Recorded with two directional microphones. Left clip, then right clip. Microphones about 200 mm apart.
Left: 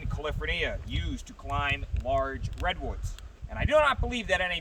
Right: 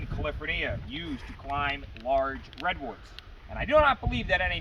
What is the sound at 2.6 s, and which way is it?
Speech, 45° left (ahead or behind).